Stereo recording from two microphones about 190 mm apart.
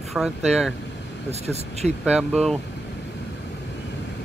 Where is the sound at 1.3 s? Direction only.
35° right (ahead or behind).